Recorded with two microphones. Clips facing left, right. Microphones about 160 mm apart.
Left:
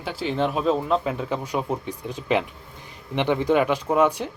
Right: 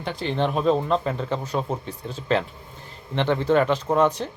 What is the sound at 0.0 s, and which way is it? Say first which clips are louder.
Speech: even; 5° left (ahead or behind).